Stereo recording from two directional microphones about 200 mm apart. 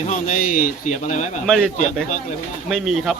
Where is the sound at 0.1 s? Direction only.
40° left (ahead or behind).